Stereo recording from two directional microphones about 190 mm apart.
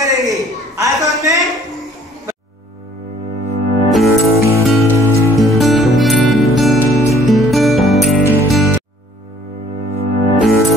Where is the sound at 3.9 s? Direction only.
Centre (ahead or behind).